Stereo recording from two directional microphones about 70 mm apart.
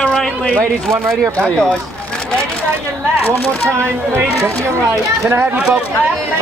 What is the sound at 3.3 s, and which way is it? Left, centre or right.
Speech, right.